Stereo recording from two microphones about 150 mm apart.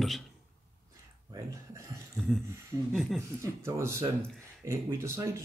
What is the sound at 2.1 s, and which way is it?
Speech, centre (ahead or behind).